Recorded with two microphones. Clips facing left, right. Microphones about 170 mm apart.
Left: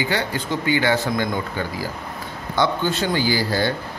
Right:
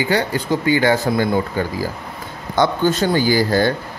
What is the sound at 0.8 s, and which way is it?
Speech, 40° right (ahead or behind).